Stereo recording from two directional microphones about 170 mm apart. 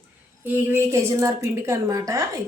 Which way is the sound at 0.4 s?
10° right (ahead or behind).